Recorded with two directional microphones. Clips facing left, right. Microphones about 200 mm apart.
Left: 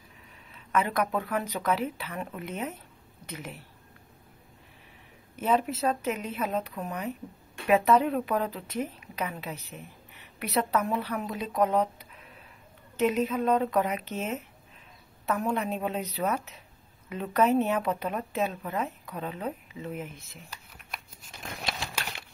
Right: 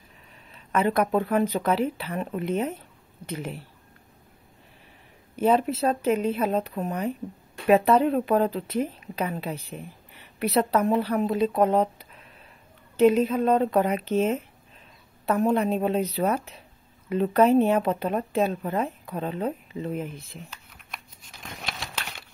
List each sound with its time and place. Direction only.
0.5 s speech: 30° right (ahead or behind)
5.3 s speech: 30° right (ahead or behind)
20.5 s shuffling cards: 5° left (ahead or behind)